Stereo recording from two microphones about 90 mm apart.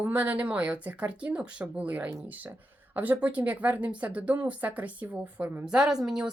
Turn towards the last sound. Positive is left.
turn(degrees=-5)  # may be behind; listen again after turning